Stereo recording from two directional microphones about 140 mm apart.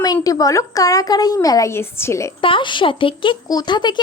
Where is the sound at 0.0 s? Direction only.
25° left (ahead or behind).